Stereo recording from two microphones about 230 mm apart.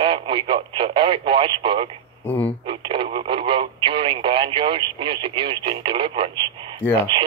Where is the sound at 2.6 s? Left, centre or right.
Right.